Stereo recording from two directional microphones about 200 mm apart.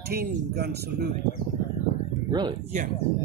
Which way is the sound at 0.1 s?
55° right (ahead or behind).